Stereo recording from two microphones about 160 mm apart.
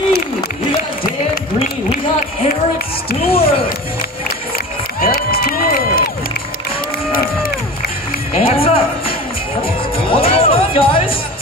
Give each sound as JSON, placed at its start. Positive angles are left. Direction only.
{"t": 3.3, "sound": "speech", "side_deg": 35}
{"t": 5.0, "sound": "crowd", "side_deg": 70}
{"t": 8.4, "sound": "music", "side_deg": 35}